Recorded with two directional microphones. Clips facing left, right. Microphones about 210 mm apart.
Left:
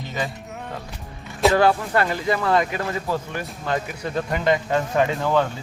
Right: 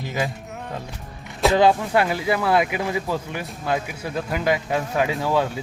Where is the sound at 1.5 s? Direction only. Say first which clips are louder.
Right 4 dB; 15° right (ahead or behind).